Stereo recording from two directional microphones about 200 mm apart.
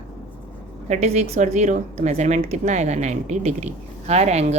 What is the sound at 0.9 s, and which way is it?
Speech, 35° right (ahead or behind).